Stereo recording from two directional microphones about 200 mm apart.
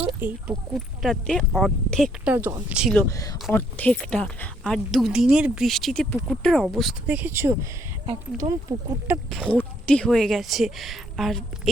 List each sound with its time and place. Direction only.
0.0 s speech: 10° right (ahead or behind)
2.3 s speech: 10° right (ahead or behind)
2.9 s speech: 15° left (ahead or behind); by 7.5 s 10° right (ahead or behind)
8.0 s speech: 20° right (ahead or behind)
9.0 s speech: 5° right (ahead or behind)